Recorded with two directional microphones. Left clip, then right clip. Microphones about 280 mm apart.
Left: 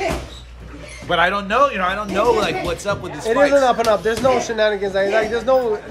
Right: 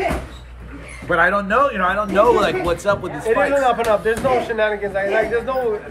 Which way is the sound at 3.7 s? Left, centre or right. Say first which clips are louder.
Even; left.